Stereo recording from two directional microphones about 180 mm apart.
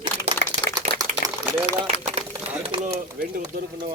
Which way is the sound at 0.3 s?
35° right (ahead or behind).